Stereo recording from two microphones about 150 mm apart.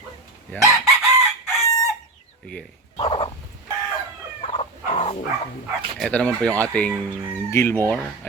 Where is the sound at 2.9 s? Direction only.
40° left (ahead or behind).